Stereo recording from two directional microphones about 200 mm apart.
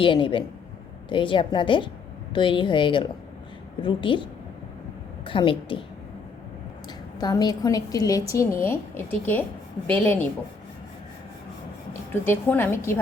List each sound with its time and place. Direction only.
0.0 s a woman's voice: 25° left (ahead or behind)
7.2 s a woman's voice: 20° left (ahead or behind)
12.2 s a woman's voice: 10° left (ahead or behind)